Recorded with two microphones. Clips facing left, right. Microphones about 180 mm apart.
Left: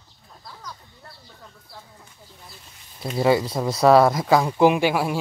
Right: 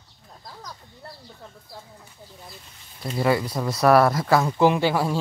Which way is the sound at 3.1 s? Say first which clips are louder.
Left 3 dB; 20° left (ahead or behind).